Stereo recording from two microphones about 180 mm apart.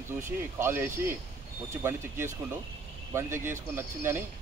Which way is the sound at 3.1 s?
15° right (ahead or behind).